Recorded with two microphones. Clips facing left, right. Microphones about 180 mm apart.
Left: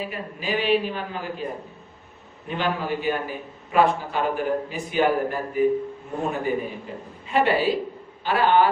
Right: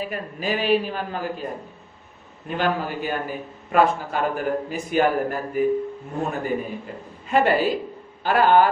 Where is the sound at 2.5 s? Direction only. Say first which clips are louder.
Right 1 dB; 45° right (ahead or behind).